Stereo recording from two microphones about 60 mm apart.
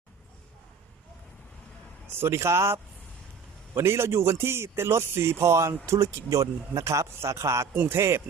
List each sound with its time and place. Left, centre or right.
2.1 s speech: right